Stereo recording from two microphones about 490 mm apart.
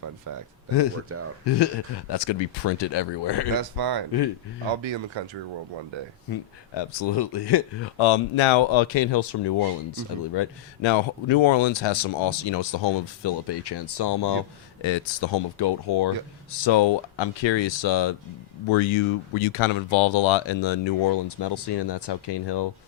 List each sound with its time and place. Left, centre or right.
0.3 s speech: right
1.1 s speech: right
1.5 s speech: left
3.6 s speech: right
4.8 s speech: right
6.3 s speech: left
18.7 s speech: left